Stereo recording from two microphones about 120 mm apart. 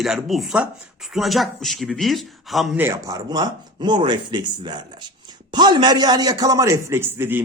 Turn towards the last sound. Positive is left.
turn(degrees=-20)  # may be behind; listen again after turning